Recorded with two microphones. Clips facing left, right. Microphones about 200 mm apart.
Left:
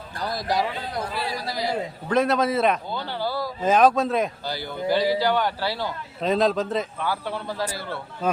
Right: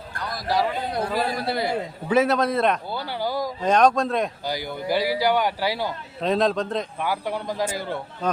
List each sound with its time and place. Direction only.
0.2 s speech: 30° left (ahead or behind)
1.1 s speech: 50° right (ahead or behind)
2.0 s a man's voice: 5° right (ahead or behind)
2.9 s speech: 10° right (ahead or behind)
3.6 s a man's voice: 5° left (ahead or behind)
4.4 s a man's voice: 10° right (ahead or behind)
6.2 s a man's voice: centre (ahead or behind)
7.0 s a man's voice: 15° right (ahead or behind)
8.2 s speech: 5° left (ahead or behind)